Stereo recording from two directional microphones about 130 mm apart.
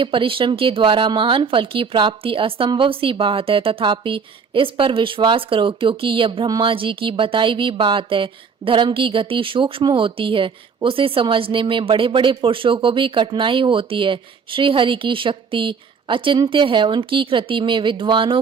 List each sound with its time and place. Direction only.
0.0 s speech: 40° right (ahead or behind)